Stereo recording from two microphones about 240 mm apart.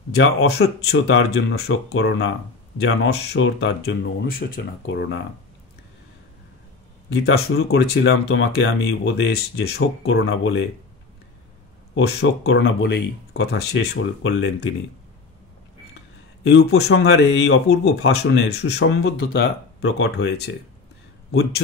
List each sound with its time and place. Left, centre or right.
0.1 s speech: left
7.1 s speech: left
11.9 s speech: left
16.4 s speech: left